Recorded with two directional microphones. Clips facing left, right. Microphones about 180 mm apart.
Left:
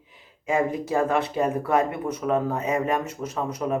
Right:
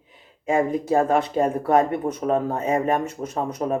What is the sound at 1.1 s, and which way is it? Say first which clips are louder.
Speech: right 3 dB; 45° right (ahead or behind).